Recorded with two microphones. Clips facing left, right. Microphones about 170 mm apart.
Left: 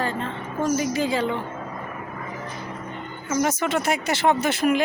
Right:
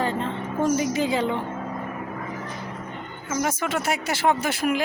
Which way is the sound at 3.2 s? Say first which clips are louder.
Left 3 dB; 5° right (ahead or behind).